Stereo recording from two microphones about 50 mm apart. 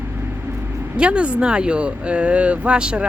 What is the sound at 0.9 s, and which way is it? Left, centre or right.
Speech, right.